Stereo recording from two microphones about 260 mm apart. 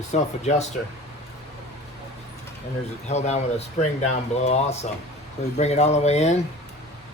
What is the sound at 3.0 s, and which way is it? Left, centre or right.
Speech, left.